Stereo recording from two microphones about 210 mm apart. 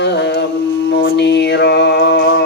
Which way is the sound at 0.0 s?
55° left (ahead or behind).